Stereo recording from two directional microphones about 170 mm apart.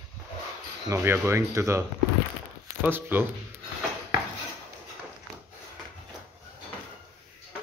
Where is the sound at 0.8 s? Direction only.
15° right (ahead or behind).